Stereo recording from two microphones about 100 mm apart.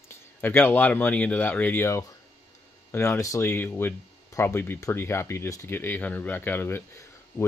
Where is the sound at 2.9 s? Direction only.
25° left (ahead or behind).